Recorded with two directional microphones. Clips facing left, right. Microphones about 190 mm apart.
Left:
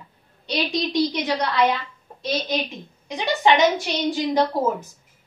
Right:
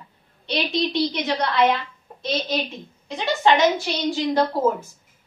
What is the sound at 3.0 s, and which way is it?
A woman's voice, 15° left (ahead or behind).